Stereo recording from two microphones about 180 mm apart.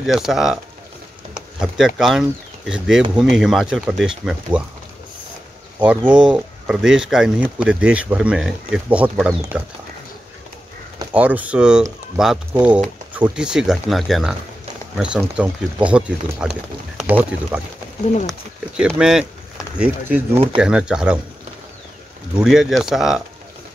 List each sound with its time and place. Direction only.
0.0 s speech: centre (ahead or behind)
6.0 s speech: 25° right (ahead or behind)
6.3 s speech: 5° right (ahead or behind)
11.1 s speech: 5° right (ahead or behind)
18.8 s speech: 5° right (ahead or behind)
22.4 s speech: centre (ahead or behind)